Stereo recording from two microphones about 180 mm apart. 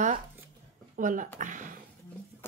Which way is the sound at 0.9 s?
45° right (ahead or behind).